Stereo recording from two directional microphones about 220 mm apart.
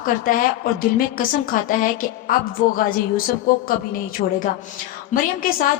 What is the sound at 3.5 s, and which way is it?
A woman's voice, 40° left (ahead or behind).